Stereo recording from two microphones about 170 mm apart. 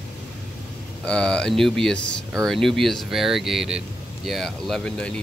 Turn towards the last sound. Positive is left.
turn(degrees=5)  # may be behind; listen again after turning